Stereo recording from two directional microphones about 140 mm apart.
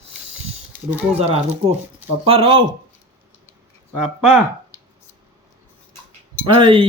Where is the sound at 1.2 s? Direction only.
45° right (ahead or behind).